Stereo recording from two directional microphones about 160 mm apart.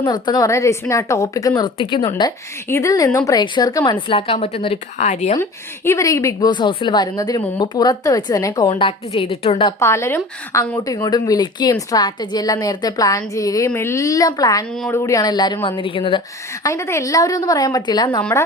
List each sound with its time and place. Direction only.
0.0 s speech: 25° left (ahead or behind)
2.6 s speech: 20° left (ahead or behind)
4.4 s speech: 40° left (ahead or behind)
5.4 s speech: 15° left (ahead or behind)
8.8 s a woman's voice: 35° left (ahead or behind)
9.8 s a woman's voice: 15° left (ahead or behind)
16.6 s speech: 15° left (ahead or behind)
18.2 s speech: 10° left (ahead or behind)